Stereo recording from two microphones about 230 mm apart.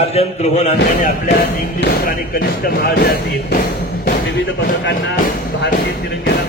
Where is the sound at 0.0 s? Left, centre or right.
Left.